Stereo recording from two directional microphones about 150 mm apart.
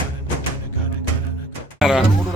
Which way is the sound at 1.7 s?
5° right (ahead or behind).